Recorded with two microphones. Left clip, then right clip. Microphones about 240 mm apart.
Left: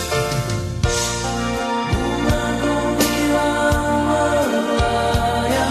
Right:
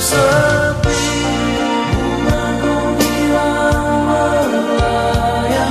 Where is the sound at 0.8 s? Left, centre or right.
Left.